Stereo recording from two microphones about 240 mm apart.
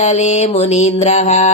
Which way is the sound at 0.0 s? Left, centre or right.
Left.